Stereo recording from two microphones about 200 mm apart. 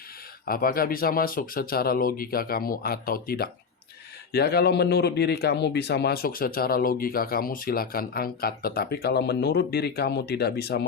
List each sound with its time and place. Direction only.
0.4 s speech: 45° left (ahead or behind)